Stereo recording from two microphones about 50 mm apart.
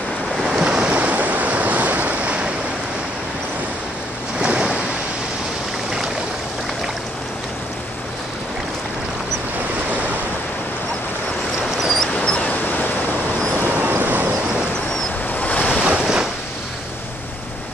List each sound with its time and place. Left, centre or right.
0.4 s waves: centre
4.4 s waves: centre
11.8 s dog: centre
12.1 s dog: left
13.6 s vehicle: right
15.3 s waves: left
15.8 s waves: centre